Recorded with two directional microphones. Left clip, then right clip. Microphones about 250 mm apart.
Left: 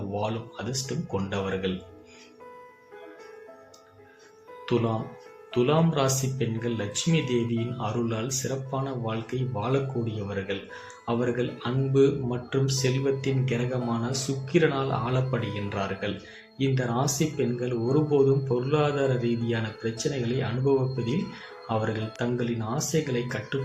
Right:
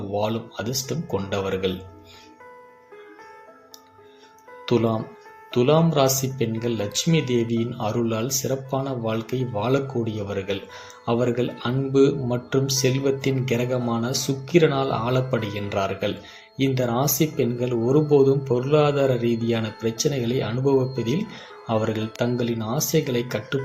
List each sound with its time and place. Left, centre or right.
0.1 s speech: centre
4.6 s speech: centre